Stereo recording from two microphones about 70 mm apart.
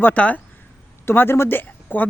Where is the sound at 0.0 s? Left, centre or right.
Left.